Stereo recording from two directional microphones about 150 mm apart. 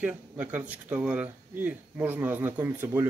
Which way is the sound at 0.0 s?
10° right (ahead or behind).